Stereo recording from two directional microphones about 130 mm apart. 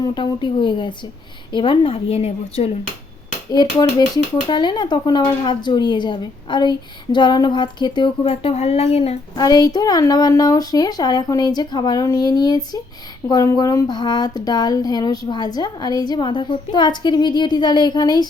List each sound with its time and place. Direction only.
0.0 s a woman's voice: 35° left (ahead or behind); by 2.7 s 50° left (ahead or behind)
3.5 s speech: 30° left (ahead or behind); by 9.1 s 50° left (ahead or behind)
9.3 s speech: 30° left (ahead or behind)